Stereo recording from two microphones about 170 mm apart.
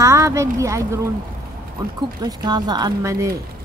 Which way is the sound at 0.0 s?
20° right (ahead or behind).